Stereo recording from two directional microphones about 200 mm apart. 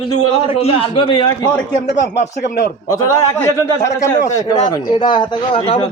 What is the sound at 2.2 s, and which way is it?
Speech, 55° left (ahead or behind).